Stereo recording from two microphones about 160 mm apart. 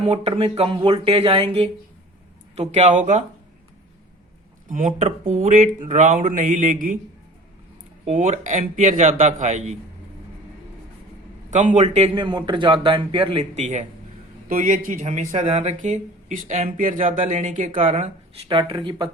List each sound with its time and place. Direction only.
0.0 s speech: 35° right (ahead or behind)
2.6 s speech: 45° right (ahead or behind)
4.7 s speech: 50° right (ahead or behind)
8.0 s speech: 45° right (ahead or behind)
11.5 s speech: 50° right (ahead or behind)
12.1 s speech: 30° right (ahead or behind)
13.6 s speech: 45° right (ahead or behind)
18.4 s speech: 30° right (ahead or behind)